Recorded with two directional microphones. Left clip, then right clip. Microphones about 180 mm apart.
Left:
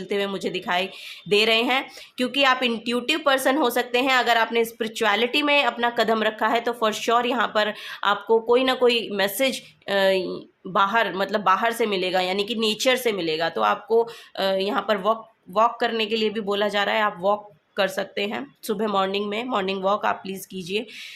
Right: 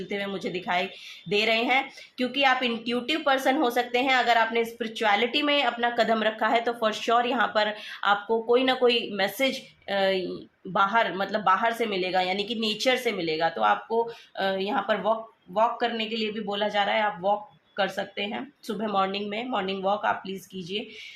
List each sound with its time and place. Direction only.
0.1 s a woman's voice: 40° left (ahead or behind)